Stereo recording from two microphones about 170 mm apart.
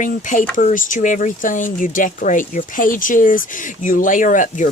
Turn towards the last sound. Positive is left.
turn(degrees=50)  # may be behind; listen again after turning